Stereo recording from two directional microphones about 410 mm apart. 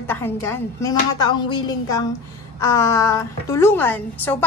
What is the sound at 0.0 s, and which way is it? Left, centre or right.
A woman's voice, centre.